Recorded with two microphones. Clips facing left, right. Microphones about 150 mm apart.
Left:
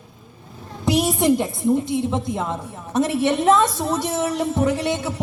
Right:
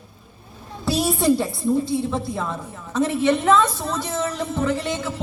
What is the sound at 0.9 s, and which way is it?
A woman's voice, 20° left (ahead or behind).